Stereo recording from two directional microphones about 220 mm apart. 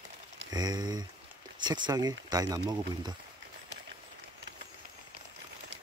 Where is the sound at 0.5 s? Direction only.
20° right (ahead or behind).